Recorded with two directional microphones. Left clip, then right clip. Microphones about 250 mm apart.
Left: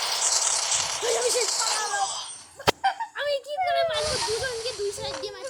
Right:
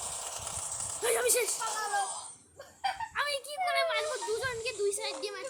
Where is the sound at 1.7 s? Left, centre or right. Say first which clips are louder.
Left 5 dB; centre.